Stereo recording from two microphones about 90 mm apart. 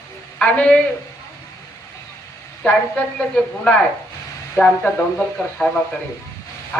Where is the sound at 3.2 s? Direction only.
10° left (ahead or behind).